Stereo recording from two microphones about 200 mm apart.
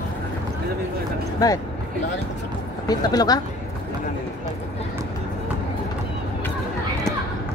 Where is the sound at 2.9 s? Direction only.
20° left (ahead or behind).